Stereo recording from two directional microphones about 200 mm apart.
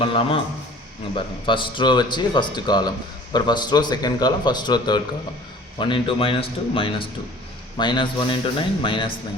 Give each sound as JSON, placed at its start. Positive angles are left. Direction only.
{"t": 0.0, "sound": "a man's voice", "side_deg": 25}
{"t": 1.5, "sound": "a man's voice", "side_deg": 25}